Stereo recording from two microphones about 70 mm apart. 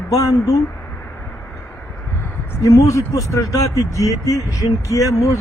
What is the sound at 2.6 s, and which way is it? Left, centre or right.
Speech, left.